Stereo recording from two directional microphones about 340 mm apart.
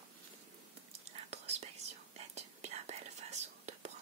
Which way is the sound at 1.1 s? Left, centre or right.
Centre.